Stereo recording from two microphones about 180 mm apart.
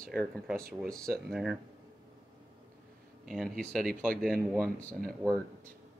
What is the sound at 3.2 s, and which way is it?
Speech, centre (ahead or behind).